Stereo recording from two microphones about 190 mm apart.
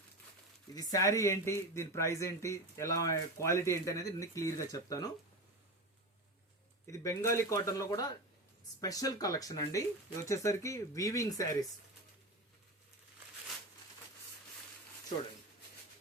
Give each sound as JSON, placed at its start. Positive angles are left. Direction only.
{"t": 0.7, "sound": "speech", "side_deg": 20}
{"t": 6.8, "sound": "speech", "side_deg": 15}